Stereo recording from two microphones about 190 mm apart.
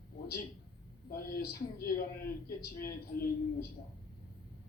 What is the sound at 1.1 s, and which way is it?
A man's voice, 50° left (ahead or behind).